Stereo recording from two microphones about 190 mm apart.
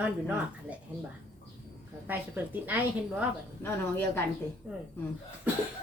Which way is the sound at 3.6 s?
10° left (ahead or behind).